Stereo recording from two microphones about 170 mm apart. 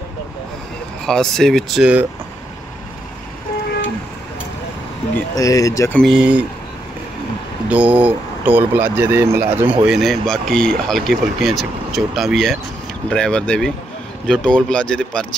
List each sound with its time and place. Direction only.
1.0 s speech: 5° left (ahead or behind)
5.3 s speech: 20° left (ahead or behind)
5.9 s speech: centre (ahead or behind)
7.7 s speech: 10° right (ahead or behind)
9.8 s speech: centre (ahead or behind)